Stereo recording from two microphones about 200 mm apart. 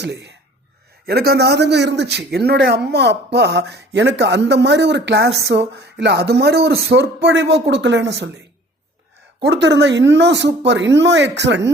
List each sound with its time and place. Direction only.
0.0 s a man's voice: 60° right (ahead or behind)
9.4 s a man's voice: 60° right (ahead or behind)